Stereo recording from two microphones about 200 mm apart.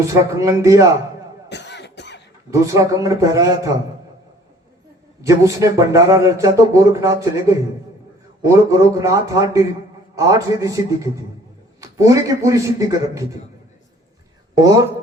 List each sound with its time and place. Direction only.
0.1 s speech: 15° right (ahead or behind)
1.5 s cough: 60° left (ahead or behind)
2.5 s speech: 15° right (ahead or behind)
5.2 s speech: 15° right (ahead or behind)
14.5 s speech: 15° right (ahead or behind)